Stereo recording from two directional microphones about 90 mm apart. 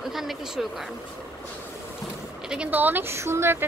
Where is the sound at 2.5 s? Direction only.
15° right (ahead or behind).